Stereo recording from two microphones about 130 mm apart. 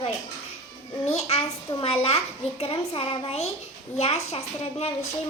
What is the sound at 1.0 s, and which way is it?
A child's voice, 55° left (ahead or behind).